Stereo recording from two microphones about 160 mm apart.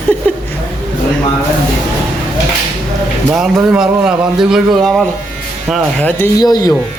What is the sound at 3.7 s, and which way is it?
A man's voice, 5° right (ahead or behind).